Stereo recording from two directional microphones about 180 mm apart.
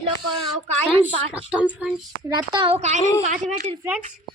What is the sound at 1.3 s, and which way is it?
Speech, 5° right (ahead or behind).